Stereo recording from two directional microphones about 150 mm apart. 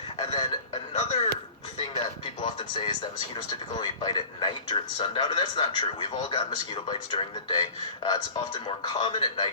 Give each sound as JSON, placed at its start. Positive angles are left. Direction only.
{"t": 0.3, "sound": "a sound", "side_deg": 45}
{"t": 2.0, "sound": "music", "side_deg": 35}
{"t": 3.3, "sound": "speech", "side_deg": 30}